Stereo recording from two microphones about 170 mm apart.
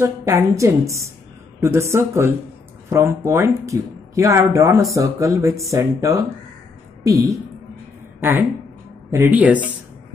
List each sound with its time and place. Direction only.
0.0 s a woman's voice: 15° right (ahead or behind)